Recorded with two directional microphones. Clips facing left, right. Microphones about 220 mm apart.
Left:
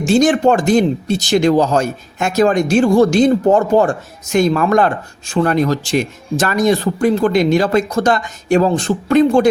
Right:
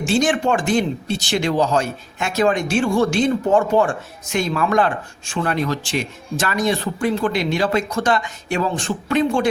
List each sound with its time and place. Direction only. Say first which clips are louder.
0.0 s speech: left 6 dB; 40° left (ahead or behind)